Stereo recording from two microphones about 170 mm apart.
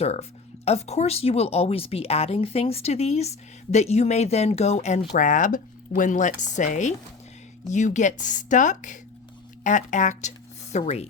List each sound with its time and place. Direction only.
0.0 s speech: 40° left (ahead or behind)